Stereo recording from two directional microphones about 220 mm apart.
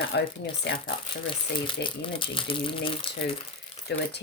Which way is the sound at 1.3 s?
20° left (ahead or behind).